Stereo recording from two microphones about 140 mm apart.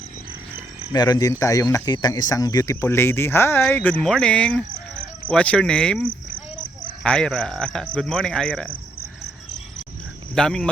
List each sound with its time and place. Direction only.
0.9 s a man's voice: 30° left (ahead or behind); by 8.7 s 5° left (ahead or behind)
10.3 s a man's voice: 5° left (ahead or behind)